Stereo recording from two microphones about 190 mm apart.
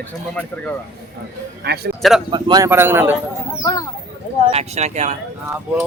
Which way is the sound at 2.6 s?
10° right (ahead or behind).